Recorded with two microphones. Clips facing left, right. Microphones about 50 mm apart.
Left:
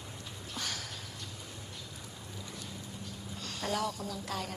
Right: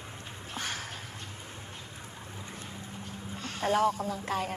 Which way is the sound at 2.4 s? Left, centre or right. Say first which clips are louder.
Right 1 dB; right.